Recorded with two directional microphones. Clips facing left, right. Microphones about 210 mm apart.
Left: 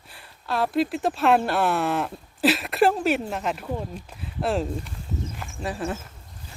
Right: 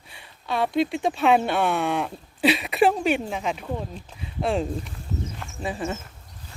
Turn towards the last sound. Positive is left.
turn(degrees=0)  # may be behind; listen again after turning